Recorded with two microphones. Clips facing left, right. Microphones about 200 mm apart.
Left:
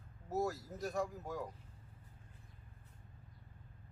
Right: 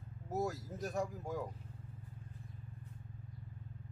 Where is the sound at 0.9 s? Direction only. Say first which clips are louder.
Right 1 dB; 15° right (ahead or behind).